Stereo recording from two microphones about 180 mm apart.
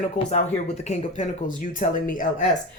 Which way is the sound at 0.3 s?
40° left (ahead or behind).